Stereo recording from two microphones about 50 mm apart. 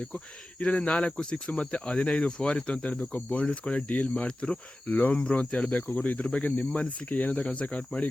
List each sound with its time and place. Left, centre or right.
0.6 s speech: left
4.9 s speech: left
5.1 s speech: left